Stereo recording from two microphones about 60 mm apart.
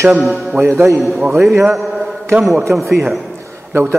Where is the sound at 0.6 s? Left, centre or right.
Right.